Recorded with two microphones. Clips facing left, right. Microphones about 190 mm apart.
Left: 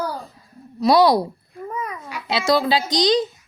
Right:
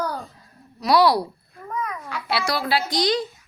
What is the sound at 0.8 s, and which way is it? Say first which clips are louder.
Speech: left 3 dB; 20° left (ahead or behind).